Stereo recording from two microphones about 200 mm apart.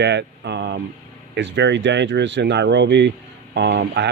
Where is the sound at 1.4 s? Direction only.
60° right (ahead or behind).